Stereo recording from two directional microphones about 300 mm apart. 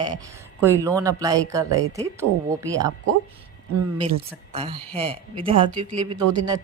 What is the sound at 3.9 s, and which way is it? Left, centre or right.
Speech, centre.